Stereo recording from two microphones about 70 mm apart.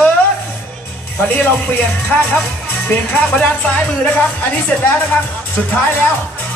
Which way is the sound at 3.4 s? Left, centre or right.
Left.